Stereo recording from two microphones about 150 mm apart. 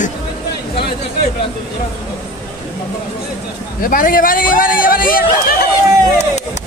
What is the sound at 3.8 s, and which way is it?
A man's voice, 70° left (ahead or behind).